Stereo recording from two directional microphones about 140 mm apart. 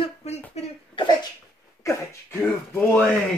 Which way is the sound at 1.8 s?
15° left (ahead or behind).